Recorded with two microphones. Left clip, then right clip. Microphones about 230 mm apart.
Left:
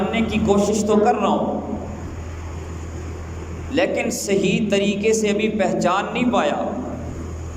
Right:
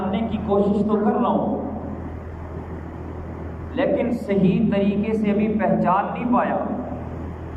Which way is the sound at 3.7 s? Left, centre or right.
Left.